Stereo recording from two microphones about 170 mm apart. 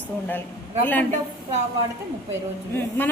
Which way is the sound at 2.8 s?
10° left (ahead or behind).